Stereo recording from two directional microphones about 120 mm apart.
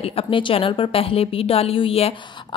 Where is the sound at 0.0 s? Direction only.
55° left (ahead or behind).